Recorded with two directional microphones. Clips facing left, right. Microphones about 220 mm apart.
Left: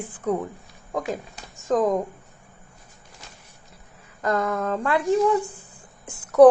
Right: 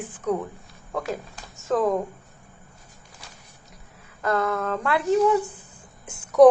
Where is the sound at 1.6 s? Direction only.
15° left (ahead or behind).